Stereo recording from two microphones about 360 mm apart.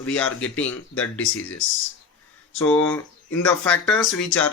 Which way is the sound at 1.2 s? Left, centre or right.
Left.